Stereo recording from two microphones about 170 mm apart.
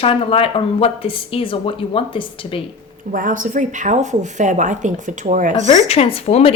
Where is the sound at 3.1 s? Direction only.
50° right (ahead or behind).